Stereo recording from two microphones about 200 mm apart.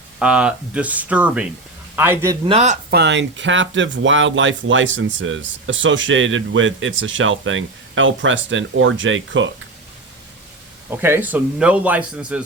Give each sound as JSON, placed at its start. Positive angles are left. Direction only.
{"t": 0.2, "sound": "a man's voice", "side_deg": -5}
{"t": 2.4, "sound": "speech", "side_deg": -30}
{"t": 2.9, "sound": "speech", "side_deg": -60}
{"t": 10.8, "sound": "a man's voice", "side_deg": -10}